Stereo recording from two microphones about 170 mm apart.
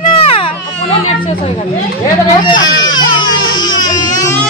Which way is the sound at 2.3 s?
25° left (ahead or behind).